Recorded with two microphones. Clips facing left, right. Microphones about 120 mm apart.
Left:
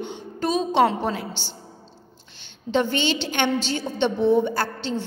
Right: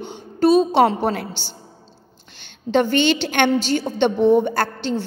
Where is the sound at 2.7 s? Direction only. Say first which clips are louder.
Right 5 dB; 60° right (ahead or behind).